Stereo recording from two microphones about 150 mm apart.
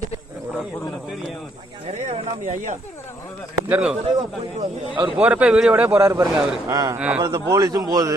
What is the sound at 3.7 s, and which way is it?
Speech, 5° right (ahead or behind).